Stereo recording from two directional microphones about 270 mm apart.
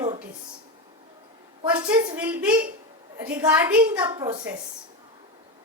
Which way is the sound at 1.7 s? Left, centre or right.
Centre.